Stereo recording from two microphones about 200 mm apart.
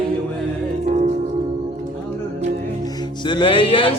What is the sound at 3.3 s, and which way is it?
Music, 25° left (ahead or behind).